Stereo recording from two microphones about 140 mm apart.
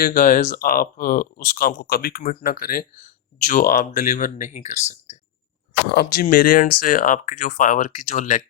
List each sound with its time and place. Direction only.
0.0 s speech: 75° left (ahead or behind); by 4.9 s 55° left (ahead or behind)
5.9 s speech: 90° left; by 8.4 s 60° left (ahead or behind)